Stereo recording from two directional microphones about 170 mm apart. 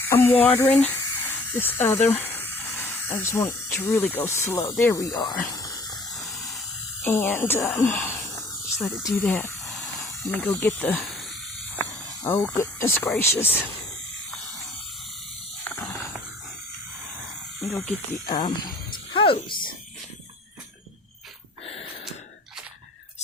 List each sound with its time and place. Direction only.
0.0 s speech: 10° left (ahead or behind)
5.5 s spray: 20° left (ahead or behind)
5.9 s hiss: centre (ahead or behind)
7.0 s speech: 15° left (ahead or behind)
8.8 s speech: centre (ahead or behind)
9.0 s speech: 10° left (ahead or behind)
11.8 s snake: 15° left (ahead or behind)
13.1 s speech: 15° left (ahead or behind)
17.6 s speech: centre (ahead or behind)
18.3 s speech: 25° left (ahead or behind)
19.1 s a sound: 30° left (ahead or behind)